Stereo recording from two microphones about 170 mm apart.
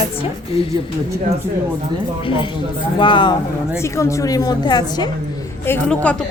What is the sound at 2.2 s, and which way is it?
A woman's voice, 30° left (ahead or behind).